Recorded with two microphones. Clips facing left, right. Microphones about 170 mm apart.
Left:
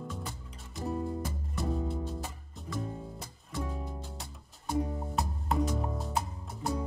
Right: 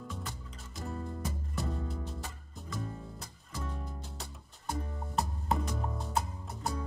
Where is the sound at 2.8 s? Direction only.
20° left (ahead or behind).